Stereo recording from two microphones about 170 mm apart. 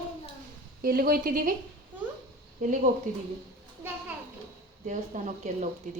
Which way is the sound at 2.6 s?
50° right (ahead or behind).